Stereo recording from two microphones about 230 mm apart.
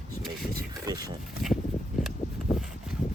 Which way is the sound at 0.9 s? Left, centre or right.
Centre.